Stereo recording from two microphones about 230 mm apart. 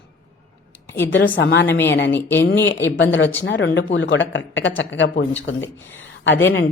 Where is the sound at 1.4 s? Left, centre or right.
Left.